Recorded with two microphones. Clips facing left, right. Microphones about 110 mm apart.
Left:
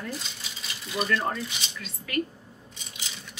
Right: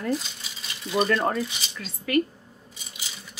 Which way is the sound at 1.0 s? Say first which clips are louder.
Right 4 dB; 40° right (ahead or behind).